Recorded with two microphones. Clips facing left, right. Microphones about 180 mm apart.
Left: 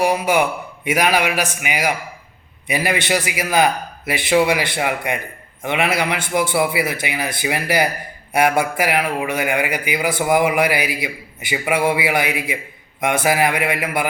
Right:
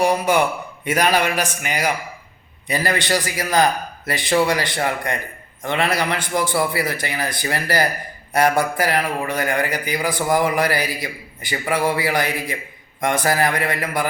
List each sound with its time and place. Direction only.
0.0 s a man's voice: 10° left (ahead or behind)